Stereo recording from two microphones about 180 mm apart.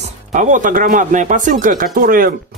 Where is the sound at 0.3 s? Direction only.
45° right (ahead or behind).